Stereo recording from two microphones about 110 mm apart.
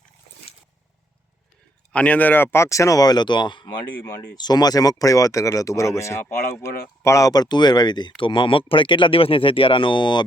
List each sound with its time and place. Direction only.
1.9 s speech: 10° left (ahead or behind); by 10.2 s 45° left (ahead or behind)